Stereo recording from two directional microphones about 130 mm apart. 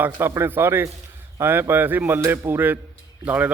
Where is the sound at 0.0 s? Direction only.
15° right (ahead or behind).